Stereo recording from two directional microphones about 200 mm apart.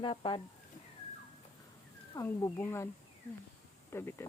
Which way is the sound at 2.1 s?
15° left (ahead or behind).